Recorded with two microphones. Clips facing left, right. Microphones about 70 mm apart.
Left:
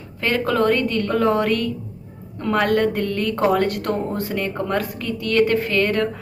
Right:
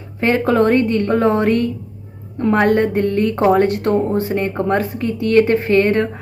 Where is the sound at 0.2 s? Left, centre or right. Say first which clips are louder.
Right 5 dB; right.